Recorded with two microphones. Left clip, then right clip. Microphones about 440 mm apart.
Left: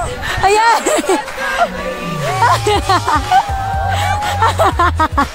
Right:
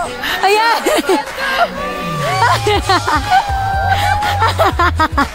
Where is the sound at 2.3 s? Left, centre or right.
Centre.